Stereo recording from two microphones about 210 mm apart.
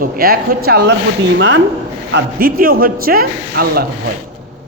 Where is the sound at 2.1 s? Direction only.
45° right (ahead or behind).